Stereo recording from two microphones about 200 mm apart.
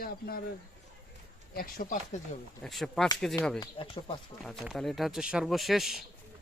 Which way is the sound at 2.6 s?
Centre (ahead or behind).